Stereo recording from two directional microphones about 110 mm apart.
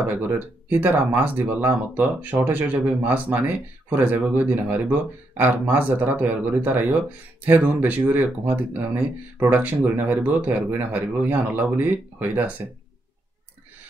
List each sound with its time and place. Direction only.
0.7 s speech: 15° right (ahead or behind)